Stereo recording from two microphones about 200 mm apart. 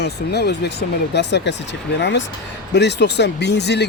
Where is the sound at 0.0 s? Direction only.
55° left (ahead or behind).